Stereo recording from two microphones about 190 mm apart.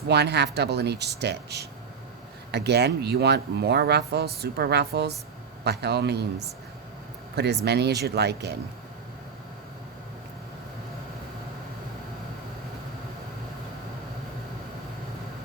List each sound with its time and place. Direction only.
0.1 s speech: 60° right (ahead or behind)
7.3 s speech: 60° right (ahead or behind)